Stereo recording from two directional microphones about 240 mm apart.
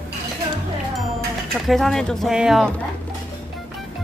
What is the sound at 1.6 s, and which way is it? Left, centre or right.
Speech, centre.